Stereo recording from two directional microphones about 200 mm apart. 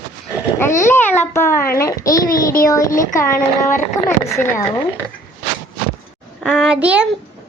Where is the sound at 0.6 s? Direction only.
15° left (ahead or behind).